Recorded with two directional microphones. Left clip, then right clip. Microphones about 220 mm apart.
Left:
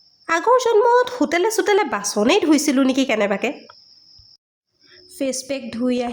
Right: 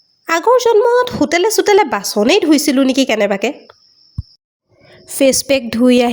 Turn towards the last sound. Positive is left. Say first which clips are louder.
# right 11 dB
turn(degrees=-40)  # may be behind; listen again after turning